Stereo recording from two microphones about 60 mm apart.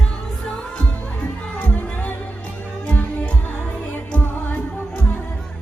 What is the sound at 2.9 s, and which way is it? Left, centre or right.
Music, left.